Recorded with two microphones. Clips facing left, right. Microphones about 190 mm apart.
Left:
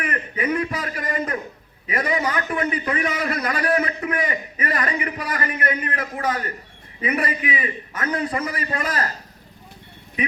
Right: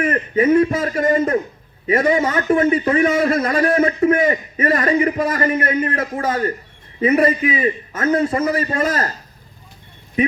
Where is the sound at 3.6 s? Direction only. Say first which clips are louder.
Right 7 dB; 45° right (ahead or behind).